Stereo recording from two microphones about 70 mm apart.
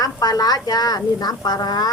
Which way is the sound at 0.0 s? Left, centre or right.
Left.